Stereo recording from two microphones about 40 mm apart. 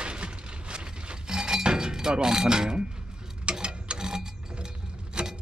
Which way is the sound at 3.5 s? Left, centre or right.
Right.